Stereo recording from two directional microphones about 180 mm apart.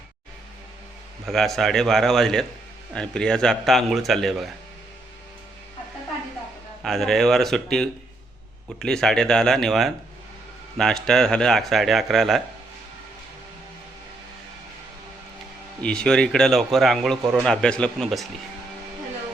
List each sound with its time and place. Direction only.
1.2 s speech: centre (ahead or behind)
6.8 s speech: centre (ahead or behind)
15.8 s speech: 5° left (ahead or behind)